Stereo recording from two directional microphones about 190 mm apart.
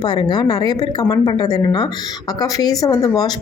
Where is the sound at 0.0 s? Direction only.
25° left (ahead or behind).